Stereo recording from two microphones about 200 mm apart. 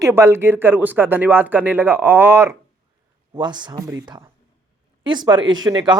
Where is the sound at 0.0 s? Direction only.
10° right (ahead or behind).